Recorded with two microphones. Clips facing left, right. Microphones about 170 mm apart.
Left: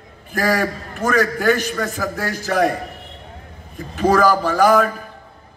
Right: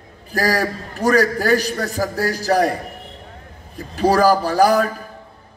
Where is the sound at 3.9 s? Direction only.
35° right (ahead or behind).